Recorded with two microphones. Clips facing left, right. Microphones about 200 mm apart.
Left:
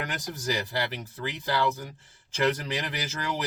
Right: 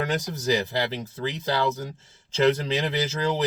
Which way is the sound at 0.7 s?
20° right (ahead or behind).